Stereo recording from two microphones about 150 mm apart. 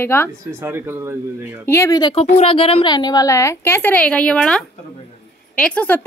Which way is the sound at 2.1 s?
40° left (ahead or behind).